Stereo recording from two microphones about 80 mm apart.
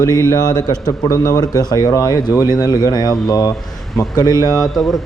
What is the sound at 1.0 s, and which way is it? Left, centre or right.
Speech, left.